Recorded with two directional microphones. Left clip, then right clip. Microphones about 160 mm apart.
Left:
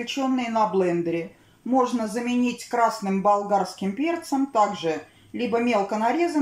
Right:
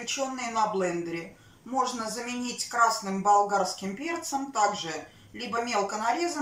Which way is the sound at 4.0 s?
55° left (ahead or behind).